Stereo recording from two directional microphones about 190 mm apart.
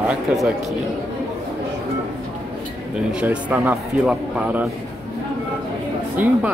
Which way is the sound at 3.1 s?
5° right (ahead or behind).